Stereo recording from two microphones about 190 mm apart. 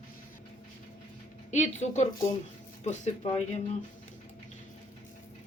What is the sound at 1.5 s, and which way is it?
A woman's voice, 40° left (ahead or behind).